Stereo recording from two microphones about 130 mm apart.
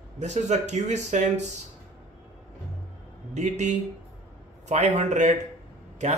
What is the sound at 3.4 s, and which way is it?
A man's voice, 65° right (ahead or behind).